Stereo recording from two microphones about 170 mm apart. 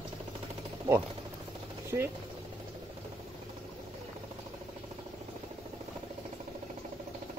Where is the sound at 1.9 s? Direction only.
20° right (ahead or behind).